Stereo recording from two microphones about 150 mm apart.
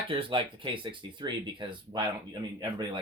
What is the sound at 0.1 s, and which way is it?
Speech, 35° right (ahead or behind).